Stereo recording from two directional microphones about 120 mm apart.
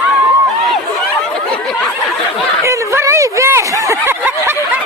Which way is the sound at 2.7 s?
25° right (ahead or behind).